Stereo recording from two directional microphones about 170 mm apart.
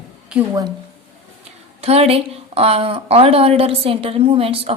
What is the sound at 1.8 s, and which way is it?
A woman's voice, 35° right (ahead or behind).